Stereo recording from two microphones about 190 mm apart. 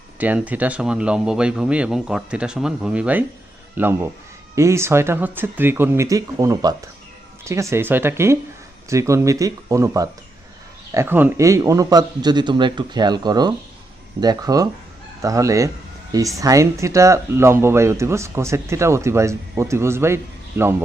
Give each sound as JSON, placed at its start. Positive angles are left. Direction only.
{"t": 0.2, "sound": "a man's voice", "side_deg": -10}